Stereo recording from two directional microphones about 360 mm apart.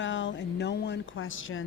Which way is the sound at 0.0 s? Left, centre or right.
Left.